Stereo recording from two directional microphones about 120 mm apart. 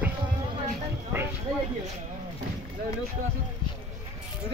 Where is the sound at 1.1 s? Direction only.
20° right (ahead or behind).